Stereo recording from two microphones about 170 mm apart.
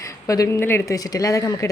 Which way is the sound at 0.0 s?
20° left (ahead or behind).